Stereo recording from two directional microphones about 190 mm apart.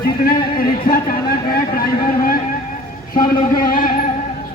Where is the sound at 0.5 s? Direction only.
50° left (ahead or behind).